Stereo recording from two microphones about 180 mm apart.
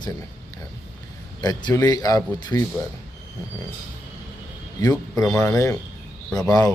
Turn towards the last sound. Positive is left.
turn(degrees=20)  # may be behind; listen again after turning